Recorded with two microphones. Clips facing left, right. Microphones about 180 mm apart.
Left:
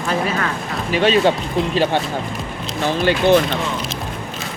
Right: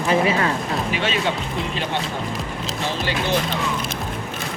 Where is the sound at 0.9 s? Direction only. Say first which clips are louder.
Left 12 dB; 35° left (ahead or behind).